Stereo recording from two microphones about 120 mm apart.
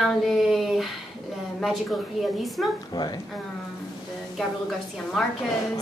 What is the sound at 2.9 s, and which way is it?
Speech, 35° left (ahead or behind).